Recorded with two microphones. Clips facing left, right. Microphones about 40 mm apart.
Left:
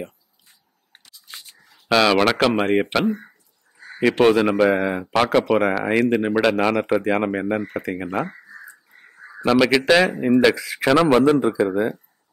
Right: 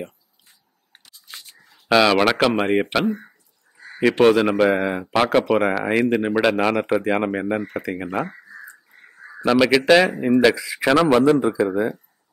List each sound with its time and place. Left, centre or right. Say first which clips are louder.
1.6 s speech: right 1 dB; centre
10.7 s a man's voice: even; centre
11.3 s a man's voice: even; centre